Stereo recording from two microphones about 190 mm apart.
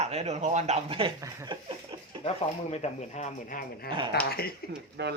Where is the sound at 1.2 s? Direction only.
20° right (ahead or behind).